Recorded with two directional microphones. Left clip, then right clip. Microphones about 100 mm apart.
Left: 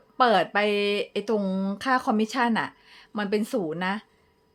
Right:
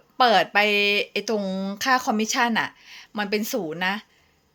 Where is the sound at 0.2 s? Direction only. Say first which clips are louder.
Right 3 dB; 40° left (ahead or behind).